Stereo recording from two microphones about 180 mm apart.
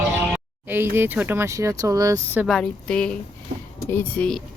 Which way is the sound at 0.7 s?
10° right (ahead or behind).